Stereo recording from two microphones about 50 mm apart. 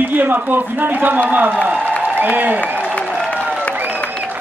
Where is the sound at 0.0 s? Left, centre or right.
Right.